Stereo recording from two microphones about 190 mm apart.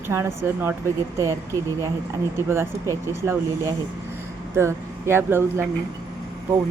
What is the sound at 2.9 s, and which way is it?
Speech, 15° right (ahead or behind).